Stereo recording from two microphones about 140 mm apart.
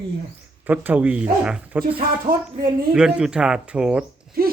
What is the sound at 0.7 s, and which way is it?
Speech, 10° right (ahead or behind).